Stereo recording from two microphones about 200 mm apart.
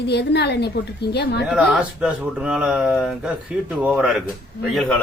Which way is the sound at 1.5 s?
5° right (ahead or behind).